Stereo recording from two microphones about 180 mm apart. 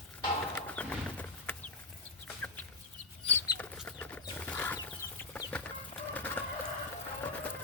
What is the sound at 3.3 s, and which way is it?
Chicken, 10° left (ahead or behind).